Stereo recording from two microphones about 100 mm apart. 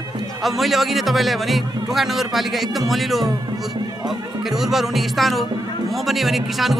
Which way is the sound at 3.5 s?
45° right (ahead or behind).